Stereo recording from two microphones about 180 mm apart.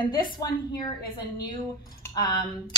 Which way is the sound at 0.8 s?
25° left (ahead or behind).